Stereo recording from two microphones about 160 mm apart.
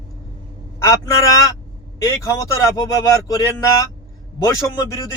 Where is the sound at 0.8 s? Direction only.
20° left (ahead or behind).